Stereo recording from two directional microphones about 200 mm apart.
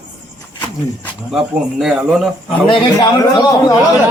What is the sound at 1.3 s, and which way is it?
Speech, 5° right (ahead or behind).